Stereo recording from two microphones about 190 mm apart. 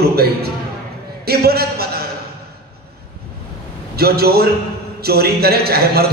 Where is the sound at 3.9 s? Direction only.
55° right (ahead or behind).